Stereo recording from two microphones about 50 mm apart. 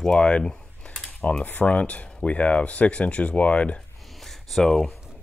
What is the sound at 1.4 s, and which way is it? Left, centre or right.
Speech, left.